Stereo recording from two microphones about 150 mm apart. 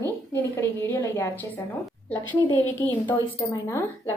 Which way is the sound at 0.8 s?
20° left (ahead or behind).